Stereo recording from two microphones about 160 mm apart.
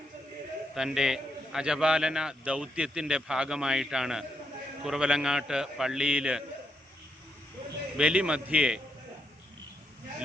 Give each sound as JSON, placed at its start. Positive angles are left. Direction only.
{"t": 0.7, "sound": "a man's voice", "side_deg": -5}
{"t": 7.9, "sound": "a man's voice", "side_deg": -5}